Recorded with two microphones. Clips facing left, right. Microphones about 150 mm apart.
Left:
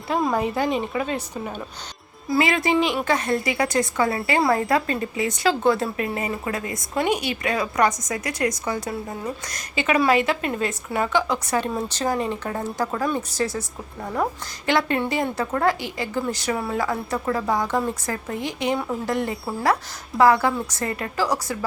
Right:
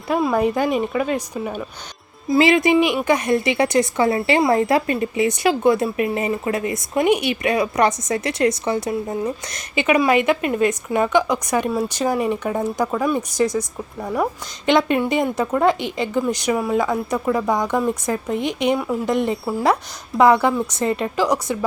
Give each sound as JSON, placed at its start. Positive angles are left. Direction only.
{"t": 0.2, "sound": "speech", "side_deg": -5}
{"t": 0.4, "sound": "speech", "side_deg": -15}
{"t": 2.3, "sound": "speech", "side_deg": -20}